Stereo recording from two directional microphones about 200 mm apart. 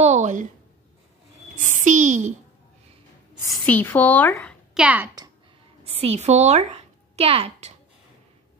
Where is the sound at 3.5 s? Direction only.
10° left (ahead or behind); by 5.1 s 5° right (ahead or behind).